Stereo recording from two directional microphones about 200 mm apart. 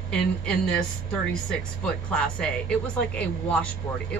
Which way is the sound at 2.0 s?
5° left (ahead or behind).